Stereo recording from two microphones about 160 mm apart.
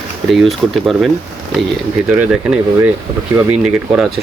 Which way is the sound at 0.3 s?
Centre (ahead or behind).